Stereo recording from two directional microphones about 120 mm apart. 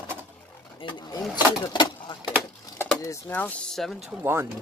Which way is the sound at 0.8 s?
45° left (ahead or behind).